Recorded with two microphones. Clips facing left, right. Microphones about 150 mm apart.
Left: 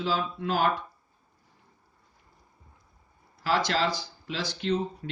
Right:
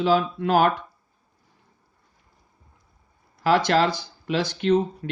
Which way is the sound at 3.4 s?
55° right (ahead or behind).